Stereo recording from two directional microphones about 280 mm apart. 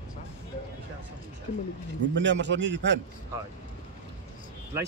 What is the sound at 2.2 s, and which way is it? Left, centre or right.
Speech, right.